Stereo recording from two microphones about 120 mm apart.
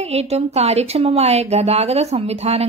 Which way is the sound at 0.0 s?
60° right (ahead or behind).